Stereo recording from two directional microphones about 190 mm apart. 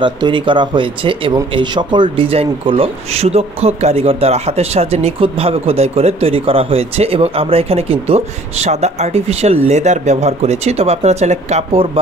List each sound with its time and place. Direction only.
0.0 s speech: 25° right (ahead or behind)